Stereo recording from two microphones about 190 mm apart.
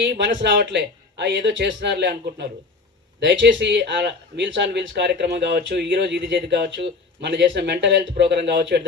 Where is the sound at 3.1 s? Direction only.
70° right (ahead or behind).